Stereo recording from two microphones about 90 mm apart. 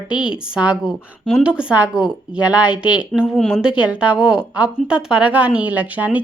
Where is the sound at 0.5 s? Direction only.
10° right (ahead or behind).